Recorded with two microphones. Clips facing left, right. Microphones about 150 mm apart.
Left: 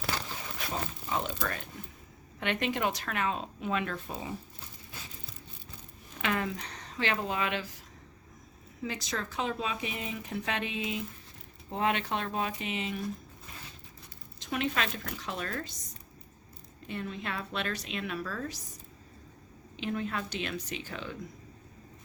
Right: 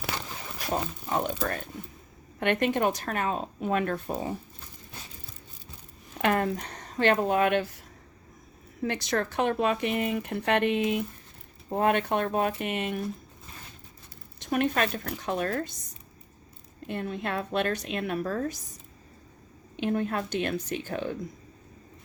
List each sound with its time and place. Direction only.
0.7 s speech: 55° right (ahead or behind)
1.4 s speech: 40° right (ahead or behind)
6.1 s speech: 50° right (ahead or behind)
8.8 s speech: 65° right (ahead or behind)
14.4 s speech: 50° right (ahead or behind)
16.8 s speech: 55° right (ahead or behind)
19.7 s speech: 55° right (ahead or behind)